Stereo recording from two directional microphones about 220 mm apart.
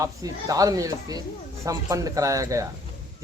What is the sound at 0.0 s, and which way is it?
Speech, 15° right (ahead or behind).